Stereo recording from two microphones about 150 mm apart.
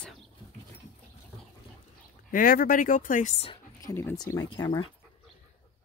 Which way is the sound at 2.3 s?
70° left (ahead or behind).